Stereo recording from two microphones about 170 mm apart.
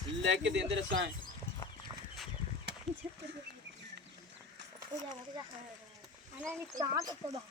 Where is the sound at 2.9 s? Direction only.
35° right (ahead or behind).